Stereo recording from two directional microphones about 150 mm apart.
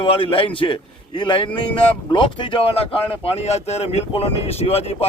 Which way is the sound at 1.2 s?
30° left (ahead or behind).